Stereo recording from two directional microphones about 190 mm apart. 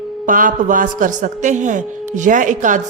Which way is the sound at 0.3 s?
45° right (ahead or behind).